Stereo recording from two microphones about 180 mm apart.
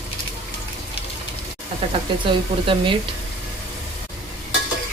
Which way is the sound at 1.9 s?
30° right (ahead or behind).